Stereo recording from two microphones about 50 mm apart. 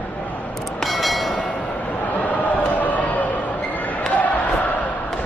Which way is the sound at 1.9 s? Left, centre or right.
Left.